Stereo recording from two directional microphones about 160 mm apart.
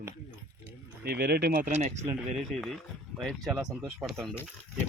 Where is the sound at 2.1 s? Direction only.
Centre (ahead or behind).